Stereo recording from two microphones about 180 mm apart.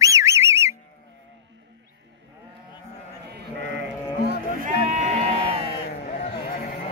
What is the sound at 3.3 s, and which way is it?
Sheep, 70° right (ahead or behind).